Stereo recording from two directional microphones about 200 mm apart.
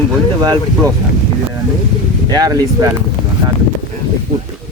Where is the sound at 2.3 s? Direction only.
20° right (ahead or behind).